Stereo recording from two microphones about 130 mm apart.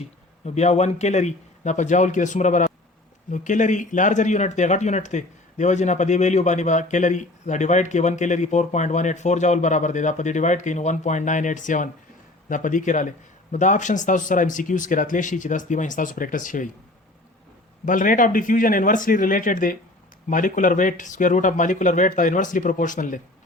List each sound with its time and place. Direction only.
0.4 s a man's voice: 60° left (ahead or behind); by 16.6 s 90° left
17.8 s a man's voice: 90° left